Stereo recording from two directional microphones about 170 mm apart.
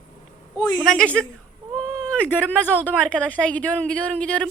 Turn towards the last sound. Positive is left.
turn(degrees=5)  # may be behind; listen again after turning